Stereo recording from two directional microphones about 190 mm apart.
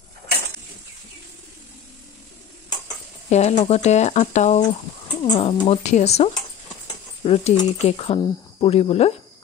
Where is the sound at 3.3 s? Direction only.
35° left (ahead or behind).